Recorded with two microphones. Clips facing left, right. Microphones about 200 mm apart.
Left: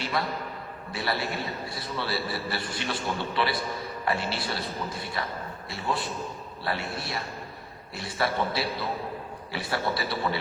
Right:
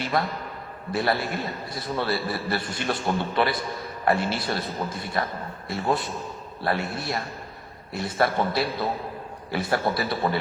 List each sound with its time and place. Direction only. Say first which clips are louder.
0.9 s a man's voice: right 5 dB; 45° right (ahead or behind)